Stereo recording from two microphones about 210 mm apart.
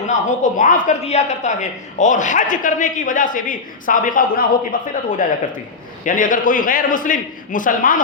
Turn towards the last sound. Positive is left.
turn(degrees=40)  # may be behind; listen again after turning